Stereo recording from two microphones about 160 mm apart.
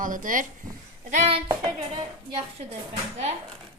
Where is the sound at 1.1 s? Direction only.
40° right (ahead or behind).